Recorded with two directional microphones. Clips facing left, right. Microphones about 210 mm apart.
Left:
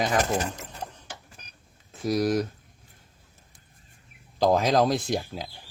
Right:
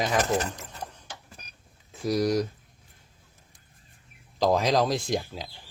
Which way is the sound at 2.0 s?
Centre (ahead or behind).